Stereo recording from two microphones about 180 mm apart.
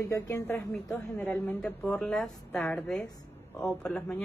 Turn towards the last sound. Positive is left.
turn(degrees=5)  # may be behind; listen again after turning